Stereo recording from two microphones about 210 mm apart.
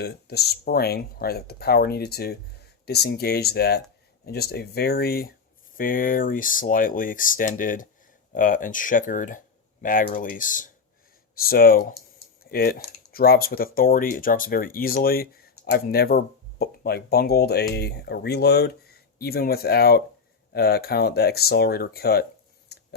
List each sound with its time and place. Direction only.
0.0 s speech: 50° left (ahead or behind)